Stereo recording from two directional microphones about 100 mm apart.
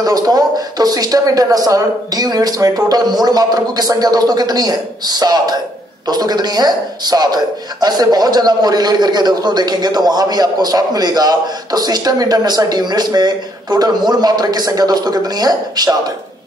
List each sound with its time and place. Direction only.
0.0 s a man's voice: 40° right (ahead or behind)